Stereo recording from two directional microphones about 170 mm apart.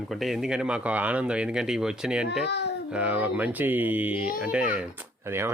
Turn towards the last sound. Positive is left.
turn(degrees=-15)  # may be behind; listen again after turning